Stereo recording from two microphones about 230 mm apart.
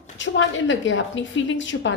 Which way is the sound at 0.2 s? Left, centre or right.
Left.